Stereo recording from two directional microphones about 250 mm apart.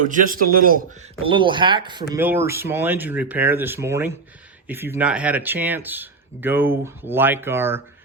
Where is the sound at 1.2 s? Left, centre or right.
Centre.